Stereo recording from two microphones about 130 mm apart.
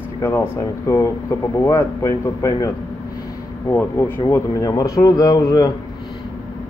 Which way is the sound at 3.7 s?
15° left (ahead or behind).